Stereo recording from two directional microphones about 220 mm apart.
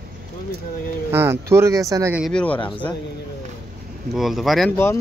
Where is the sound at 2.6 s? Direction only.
20° left (ahead or behind).